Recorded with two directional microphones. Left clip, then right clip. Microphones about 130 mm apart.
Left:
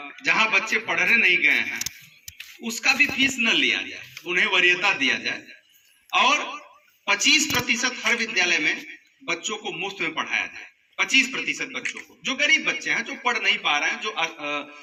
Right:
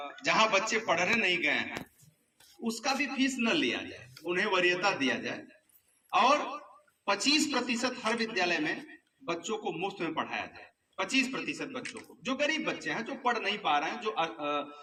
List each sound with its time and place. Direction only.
0.0 s a man's voice: 50° right (ahead or behind)
11.7 s a man's voice: 25° right (ahead or behind)
12.2 s a man's voice: 40° right (ahead or behind)